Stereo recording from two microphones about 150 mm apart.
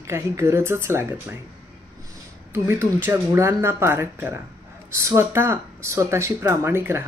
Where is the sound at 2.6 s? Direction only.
15° right (ahead or behind).